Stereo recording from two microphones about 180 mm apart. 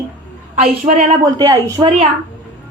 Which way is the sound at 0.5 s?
45° right (ahead or behind).